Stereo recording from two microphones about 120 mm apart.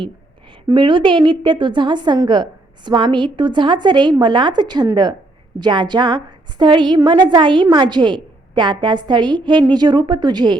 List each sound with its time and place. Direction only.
0.7 s a woman's voice: 45° right (ahead or behind)